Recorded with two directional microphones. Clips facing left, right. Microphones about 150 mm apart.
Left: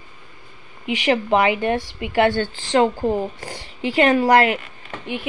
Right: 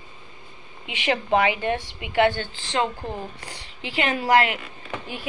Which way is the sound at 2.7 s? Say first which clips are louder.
Left 9 dB; 35° left (ahead or behind).